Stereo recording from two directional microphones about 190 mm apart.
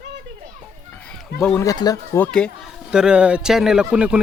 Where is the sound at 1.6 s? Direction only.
20° left (ahead or behind).